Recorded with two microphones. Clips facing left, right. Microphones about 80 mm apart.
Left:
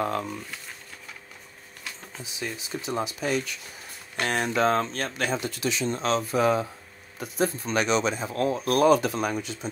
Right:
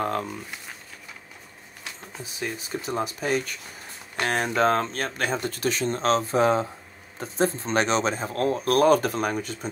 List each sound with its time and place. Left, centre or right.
2.2 s speech: right